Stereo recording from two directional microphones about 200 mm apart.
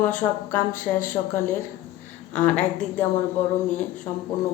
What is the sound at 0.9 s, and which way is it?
Speech, 15° left (ahead or behind).